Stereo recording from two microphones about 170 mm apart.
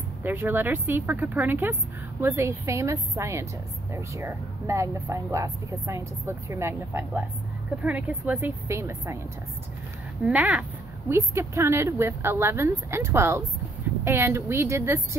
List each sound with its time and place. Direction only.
0.2 s speech: 10° right (ahead or behind)
10.2 s speech: 10° right (ahead or behind)